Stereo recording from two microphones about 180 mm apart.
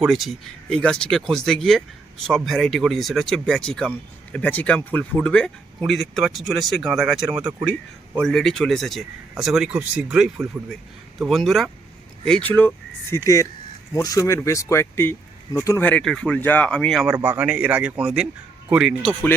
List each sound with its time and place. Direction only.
0.0 s speech: centre (ahead or behind)